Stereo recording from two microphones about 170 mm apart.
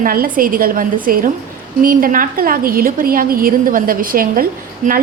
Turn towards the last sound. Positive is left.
turn(degrees=-55)  # may be behind; listen again after turning